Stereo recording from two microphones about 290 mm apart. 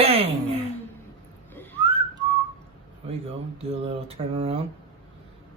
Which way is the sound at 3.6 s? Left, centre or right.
Right.